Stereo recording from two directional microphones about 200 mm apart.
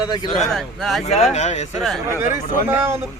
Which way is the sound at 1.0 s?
35° left (ahead or behind).